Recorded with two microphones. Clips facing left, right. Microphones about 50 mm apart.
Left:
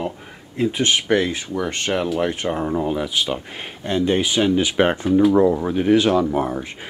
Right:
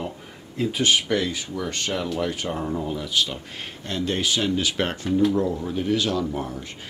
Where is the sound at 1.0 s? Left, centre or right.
Left.